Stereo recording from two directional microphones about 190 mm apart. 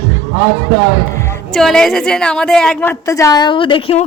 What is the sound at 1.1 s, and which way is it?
Music, 15° left (ahead or behind).